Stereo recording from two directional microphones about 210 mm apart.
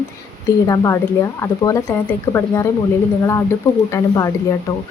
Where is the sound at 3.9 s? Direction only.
15° left (ahead or behind).